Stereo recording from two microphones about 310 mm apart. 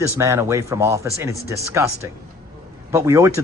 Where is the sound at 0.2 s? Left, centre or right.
Centre.